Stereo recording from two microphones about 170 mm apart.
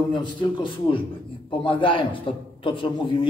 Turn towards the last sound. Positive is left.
turn(degrees=30)  # may be behind; listen again after turning